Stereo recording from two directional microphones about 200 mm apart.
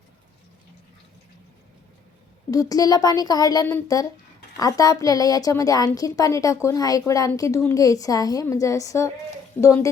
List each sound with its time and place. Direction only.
2.5 s a woman's voice: 15° left (ahead or behind)